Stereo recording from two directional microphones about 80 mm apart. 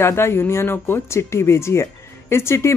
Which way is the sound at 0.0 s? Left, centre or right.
Left.